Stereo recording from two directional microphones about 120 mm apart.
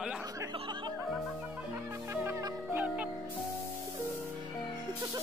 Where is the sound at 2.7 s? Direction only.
15° right (ahead or behind).